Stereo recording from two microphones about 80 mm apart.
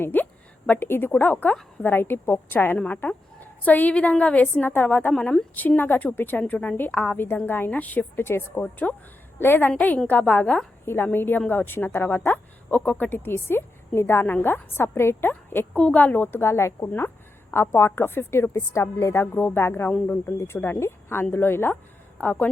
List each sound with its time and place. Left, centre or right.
0.0 s a woman's voice: left
2.7 s a woman's voice: centre
5.1 s speech: centre
5.5 s a woman's voice: left